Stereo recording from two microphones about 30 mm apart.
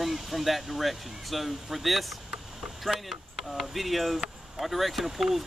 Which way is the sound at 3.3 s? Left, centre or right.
Centre.